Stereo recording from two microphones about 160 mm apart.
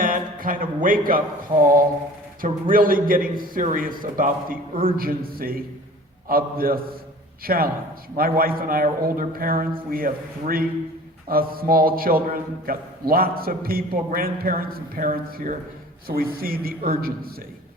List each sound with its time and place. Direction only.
0.0 s music: 60° right (ahead or behind)
2.4 s a man's voice: 60° right (ahead or behind)